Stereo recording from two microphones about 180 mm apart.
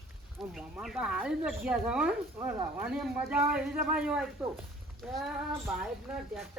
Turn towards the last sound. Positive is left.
turn(degrees=0)  # may be behind; listen again after turning